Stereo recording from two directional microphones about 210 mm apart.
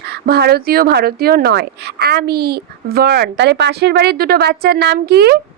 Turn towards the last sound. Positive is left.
turn(degrees=-50)  # may be behind; listen again after turning